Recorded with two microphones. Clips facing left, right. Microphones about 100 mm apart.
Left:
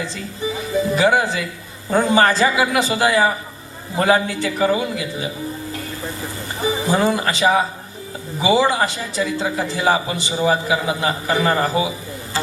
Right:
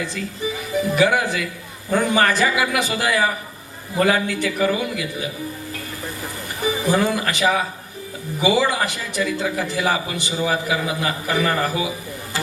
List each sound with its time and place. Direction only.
0.2 s a man's voice: 25° left (ahead or behind)
6.6 s a man's voice: 25° left (ahead or behind)